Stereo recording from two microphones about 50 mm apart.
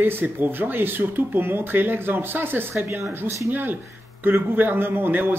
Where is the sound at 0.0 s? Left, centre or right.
Right.